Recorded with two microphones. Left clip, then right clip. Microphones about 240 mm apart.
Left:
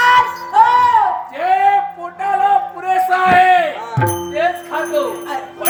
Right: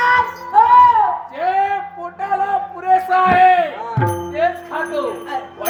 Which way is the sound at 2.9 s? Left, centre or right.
Centre.